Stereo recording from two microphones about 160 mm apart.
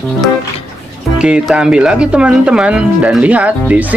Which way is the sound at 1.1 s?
5° right (ahead or behind).